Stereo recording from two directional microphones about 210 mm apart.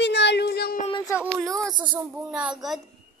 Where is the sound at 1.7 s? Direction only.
20° right (ahead or behind).